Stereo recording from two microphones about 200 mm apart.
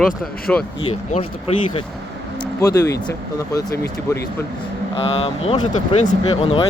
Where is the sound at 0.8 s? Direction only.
30° left (ahead or behind).